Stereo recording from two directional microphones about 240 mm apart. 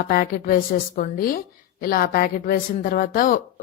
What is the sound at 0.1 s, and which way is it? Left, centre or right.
Speech, left.